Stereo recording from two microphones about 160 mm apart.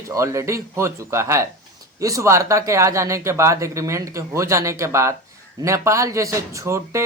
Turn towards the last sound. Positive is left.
turn(degrees=-20)  # may be behind; listen again after turning